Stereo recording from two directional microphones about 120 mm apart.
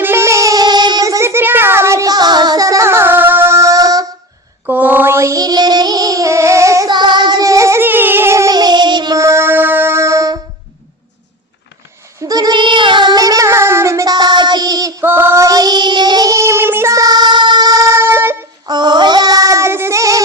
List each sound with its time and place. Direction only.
0.0 s child singing: 20° right (ahead or behind)
4.6 s child singing: 15° right (ahead or behind)
6.9 s female singing: 40° right (ahead or behind)
12.2 s child singing: 30° right (ahead or behind)
15.0 s child singing: 20° right (ahead or behind)
15.4 s child singing: 30° right (ahead or behind)
18.7 s child singing: 40° right (ahead or behind)